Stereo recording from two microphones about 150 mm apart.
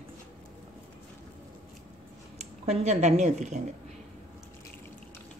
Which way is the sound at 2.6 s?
45° right (ahead or behind).